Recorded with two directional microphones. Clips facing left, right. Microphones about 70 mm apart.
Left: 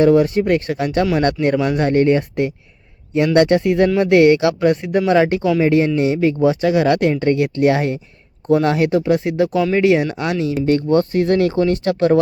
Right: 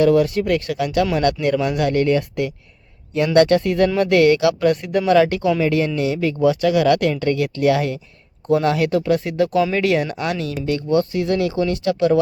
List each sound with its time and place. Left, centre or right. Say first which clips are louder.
0.0 s speech: left 2 dB; left
10.7 s speech: left 2 dB; left